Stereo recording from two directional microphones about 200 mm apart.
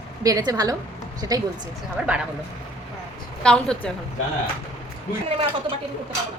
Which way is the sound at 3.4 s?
5° left (ahead or behind).